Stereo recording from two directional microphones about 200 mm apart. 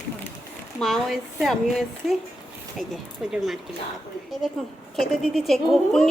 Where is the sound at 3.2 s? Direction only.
5° right (ahead or behind).